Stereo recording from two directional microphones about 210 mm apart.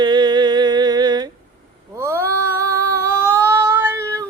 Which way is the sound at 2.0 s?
15° right (ahead or behind).